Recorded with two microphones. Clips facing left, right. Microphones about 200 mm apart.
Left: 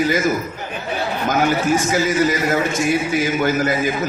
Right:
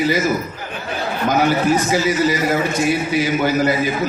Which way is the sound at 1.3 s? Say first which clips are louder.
Right 2 dB; 45° left (ahead or behind).